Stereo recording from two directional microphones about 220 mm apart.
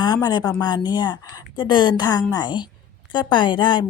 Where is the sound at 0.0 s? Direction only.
20° left (ahead or behind).